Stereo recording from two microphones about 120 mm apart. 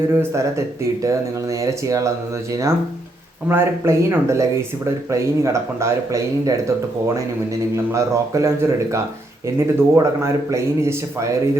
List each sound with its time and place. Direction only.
0.1 s speech: 20° right (ahead or behind)
7.9 s speech: 25° right (ahead or behind)